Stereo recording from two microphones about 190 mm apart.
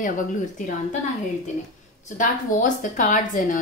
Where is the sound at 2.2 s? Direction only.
45° left (ahead or behind).